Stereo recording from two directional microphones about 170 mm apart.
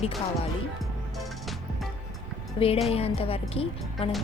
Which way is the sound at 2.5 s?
35° left (ahead or behind).